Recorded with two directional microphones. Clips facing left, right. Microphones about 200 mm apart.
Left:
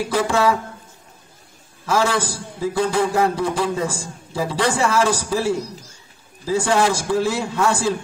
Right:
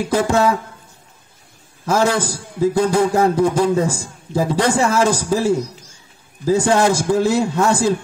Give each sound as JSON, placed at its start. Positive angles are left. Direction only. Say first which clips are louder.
{"t": 0.1, "sound": "a man's voice", "louder": "right 3 dB", "side_deg": -45}
{"t": 1.9, "sound": "a man's voice", "louder": "right 3 dB", "side_deg": -45}